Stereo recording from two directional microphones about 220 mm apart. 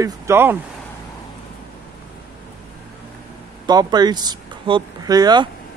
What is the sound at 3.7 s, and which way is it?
A man's voice, 20° right (ahead or behind).